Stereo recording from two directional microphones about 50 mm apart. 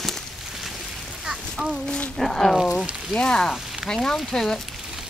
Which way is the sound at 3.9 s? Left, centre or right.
Centre.